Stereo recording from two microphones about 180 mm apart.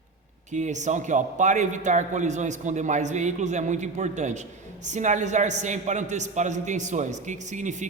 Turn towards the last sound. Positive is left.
turn(degrees=-45)  # may be behind; listen again after turning